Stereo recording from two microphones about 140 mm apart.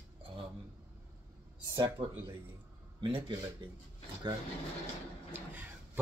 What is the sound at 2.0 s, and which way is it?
Speech, 40° right (ahead or behind).